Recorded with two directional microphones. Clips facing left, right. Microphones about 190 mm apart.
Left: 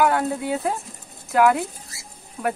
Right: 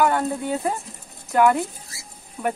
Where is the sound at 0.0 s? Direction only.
5° left (ahead or behind).